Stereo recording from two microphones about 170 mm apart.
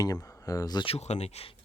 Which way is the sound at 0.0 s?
20° left (ahead or behind).